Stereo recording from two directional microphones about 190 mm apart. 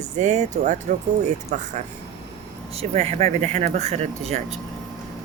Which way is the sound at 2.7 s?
30° right (ahead or behind).